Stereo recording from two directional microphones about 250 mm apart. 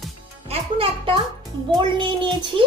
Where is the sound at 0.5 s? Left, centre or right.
Right.